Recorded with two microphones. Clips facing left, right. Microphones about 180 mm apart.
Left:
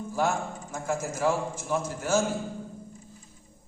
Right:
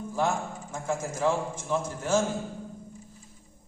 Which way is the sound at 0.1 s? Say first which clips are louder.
Left 1 dB; 10° left (ahead or behind).